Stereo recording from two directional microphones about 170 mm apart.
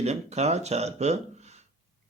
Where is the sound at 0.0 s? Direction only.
40° right (ahead or behind).